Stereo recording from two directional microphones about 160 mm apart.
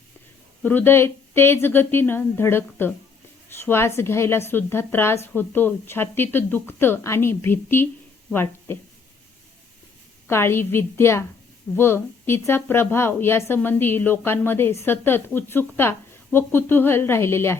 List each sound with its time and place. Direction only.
0.6 s speech: 10° left (ahead or behind)
10.2 s speech: 15° left (ahead or behind)